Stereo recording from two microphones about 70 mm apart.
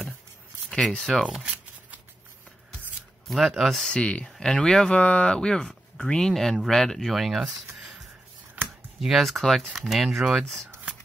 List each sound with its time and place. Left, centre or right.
0.7 s speech: centre
1.4 s shuffling cards: right
3.3 s speech: centre
3.8 s speech: centre
8.6 s a sound: right
9.0 s speech: centre